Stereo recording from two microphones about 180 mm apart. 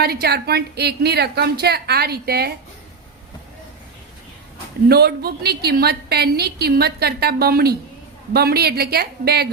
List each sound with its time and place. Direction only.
0.0 s a woman's voice: 60° right (ahead or behind)
4.9 s a woman's voice: 60° right (ahead or behind)